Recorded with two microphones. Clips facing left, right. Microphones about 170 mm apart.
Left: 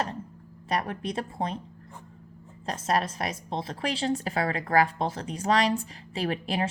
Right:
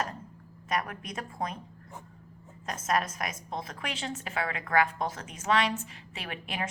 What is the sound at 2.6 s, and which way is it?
A woman's voice, 30° left (ahead or behind).